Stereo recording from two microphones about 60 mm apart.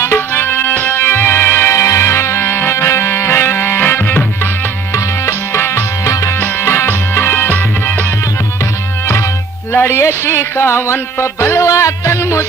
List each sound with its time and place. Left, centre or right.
0.0 s music: left
1.7 s music: left
4.9 s music: left
6.1 s music: left
6.4 s music: left
9.7 s music: left
11.6 s music: left